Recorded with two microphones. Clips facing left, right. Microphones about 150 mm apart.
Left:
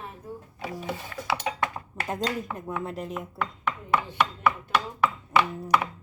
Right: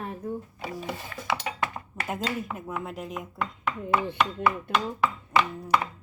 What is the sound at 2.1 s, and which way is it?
Speech, 5° right (ahead or behind).